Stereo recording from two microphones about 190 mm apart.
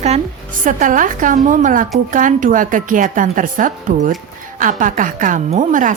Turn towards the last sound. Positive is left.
turn(degrees=-40)  # may be behind; listen again after turning